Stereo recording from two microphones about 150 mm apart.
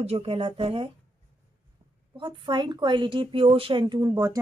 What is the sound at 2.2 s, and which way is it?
A woman's voice, 30° right (ahead or behind).